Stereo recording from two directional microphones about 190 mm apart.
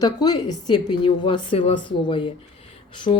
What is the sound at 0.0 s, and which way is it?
Speech, 20° left (ahead or behind).